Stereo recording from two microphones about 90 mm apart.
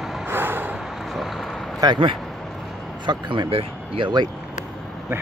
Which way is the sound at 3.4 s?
90° right.